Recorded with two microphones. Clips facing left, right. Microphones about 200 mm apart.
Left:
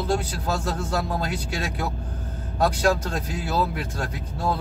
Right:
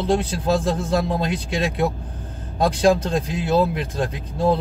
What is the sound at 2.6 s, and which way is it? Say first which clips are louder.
Speech: right 4 dB; 25° right (ahead or behind).